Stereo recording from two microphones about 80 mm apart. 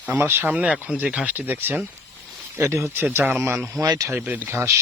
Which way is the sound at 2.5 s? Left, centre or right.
Right.